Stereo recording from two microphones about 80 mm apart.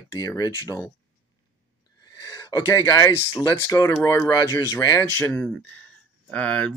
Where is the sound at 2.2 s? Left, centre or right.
Left.